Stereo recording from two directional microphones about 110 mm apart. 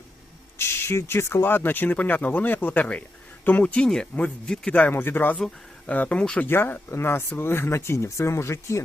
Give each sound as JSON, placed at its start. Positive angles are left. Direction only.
{"t": 0.6, "sound": "speech", "side_deg": 25}